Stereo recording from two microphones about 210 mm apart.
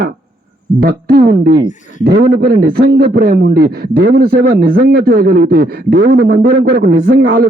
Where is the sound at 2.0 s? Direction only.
50° right (ahead or behind).